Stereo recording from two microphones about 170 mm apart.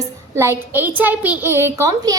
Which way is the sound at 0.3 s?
15° right (ahead or behind).